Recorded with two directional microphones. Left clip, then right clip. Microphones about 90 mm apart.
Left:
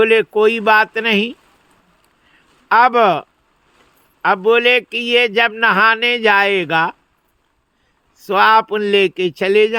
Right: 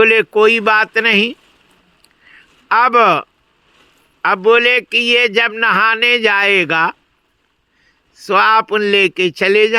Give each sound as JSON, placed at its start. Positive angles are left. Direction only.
{"t": 0.0, "sound": "speech", "side_deg": 45}
{"t": 2.3, "sound": "a sound", "side_deg": 40}
{"t": 4.4, "sound": "speech", "side_deg": 40}
{"t": 8.1, "sound": "speech", "side_deg": 40}